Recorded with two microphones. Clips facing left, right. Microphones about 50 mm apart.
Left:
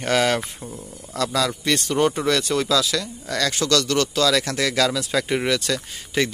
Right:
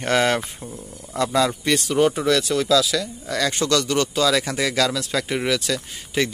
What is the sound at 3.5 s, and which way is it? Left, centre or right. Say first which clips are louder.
Speech: left 1 dB; centre.